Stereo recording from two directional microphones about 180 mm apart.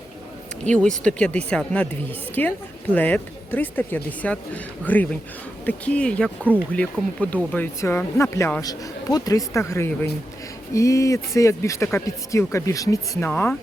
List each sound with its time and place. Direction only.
0.6 s speech: 5° left (ahead or behind)